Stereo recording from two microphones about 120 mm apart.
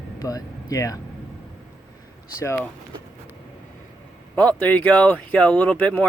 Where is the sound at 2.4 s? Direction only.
20° left (ahead or behind).